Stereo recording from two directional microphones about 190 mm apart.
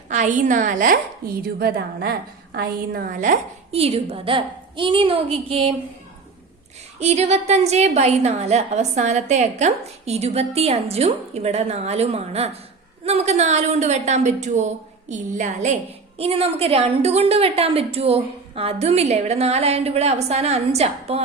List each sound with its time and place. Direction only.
0.1 s a woman's voice: 40° right (ahead or behind)
7.0 s a woman's voice: 35° right (ahead or behind)